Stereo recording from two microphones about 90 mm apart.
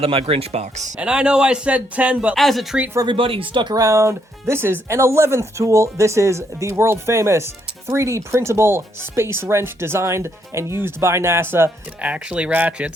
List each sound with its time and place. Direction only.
0.0 s speech: 90° right
0.9 s speech: 10° right (ahead or behind)
2.3 s speech: centre (ahead or behind)
3.1 s speech: 85° right; by 3.8 s 60° right (ahead or behind)
3.8 s speech: 35° right (ahead or behind)
12.0 s speech: 15° right (ahead or behind)